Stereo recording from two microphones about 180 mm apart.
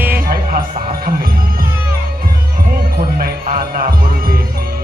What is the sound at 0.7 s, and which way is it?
Music, 50° right (ahead or behind).